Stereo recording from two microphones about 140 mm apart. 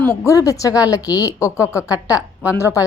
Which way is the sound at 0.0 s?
20° left (ahead or behind).